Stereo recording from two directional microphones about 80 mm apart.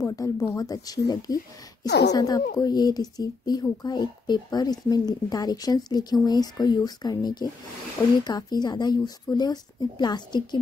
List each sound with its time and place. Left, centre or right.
0.0 s a woman's voice: left